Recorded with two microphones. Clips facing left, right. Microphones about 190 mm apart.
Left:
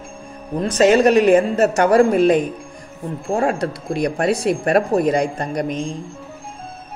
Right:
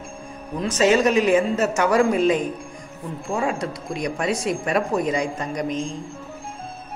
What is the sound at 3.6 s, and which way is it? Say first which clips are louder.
Speech: left 6 dB; 60° left (ahead or behind).